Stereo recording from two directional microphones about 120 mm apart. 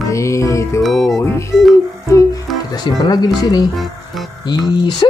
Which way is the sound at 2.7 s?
35° left (ahead or behind).